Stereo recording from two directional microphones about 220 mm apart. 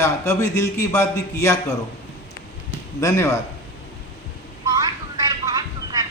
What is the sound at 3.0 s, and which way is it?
Speech, 15° left (ahead or behind).